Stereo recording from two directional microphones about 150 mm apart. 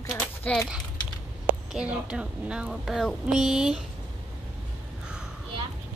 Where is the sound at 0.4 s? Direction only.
10° left (ahead or behind).